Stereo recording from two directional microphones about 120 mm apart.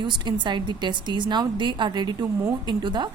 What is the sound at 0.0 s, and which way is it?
A woman's voice, 40° right (ahead or behind).